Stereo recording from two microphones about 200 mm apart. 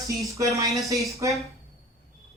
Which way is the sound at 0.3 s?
15° right (ahead or behind).